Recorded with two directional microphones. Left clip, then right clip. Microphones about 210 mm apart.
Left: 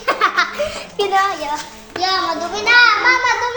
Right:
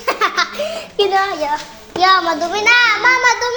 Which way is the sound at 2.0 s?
45° right (ahead or behind).